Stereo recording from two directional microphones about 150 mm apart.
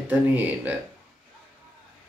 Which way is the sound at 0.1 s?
10° right (ahead or behind).